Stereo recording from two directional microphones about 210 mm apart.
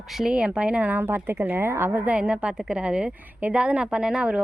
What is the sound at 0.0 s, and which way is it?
A woman's voice, centre (ahead or behind).